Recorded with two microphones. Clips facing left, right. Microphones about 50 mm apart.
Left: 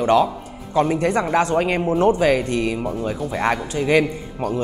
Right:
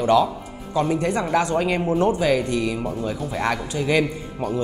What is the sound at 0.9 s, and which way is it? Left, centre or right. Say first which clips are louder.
Speech: left 2 dB; left.